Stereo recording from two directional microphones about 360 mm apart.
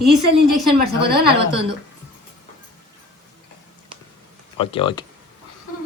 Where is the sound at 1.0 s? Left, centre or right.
Right.